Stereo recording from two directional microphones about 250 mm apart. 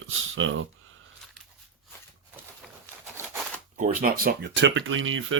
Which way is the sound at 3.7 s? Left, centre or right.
Right.